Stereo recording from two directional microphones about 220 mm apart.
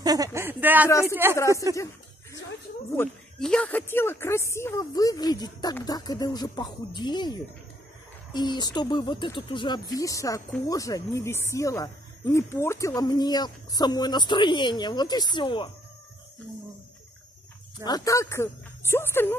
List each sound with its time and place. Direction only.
0.0 s a sound: 15° right (ahead or behind)
1.0 s speech: 10° right (ahead or behind)
3.0 s speech: 5° left (ahead or behind); by 15.7 s 20° left (ahead or behind)
17.8 s speech: 15° left (ahead or behind)